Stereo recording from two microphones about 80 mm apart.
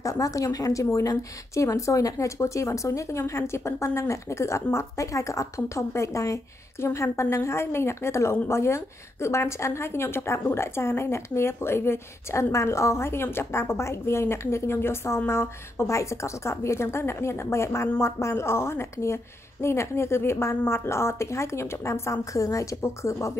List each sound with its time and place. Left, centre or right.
0.0 s a woman's voice: left